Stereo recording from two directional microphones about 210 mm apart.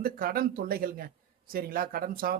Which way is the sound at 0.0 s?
45° right (ahead or behind).